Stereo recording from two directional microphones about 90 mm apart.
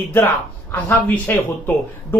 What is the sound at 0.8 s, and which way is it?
Speech, 20° left (ahead or behind).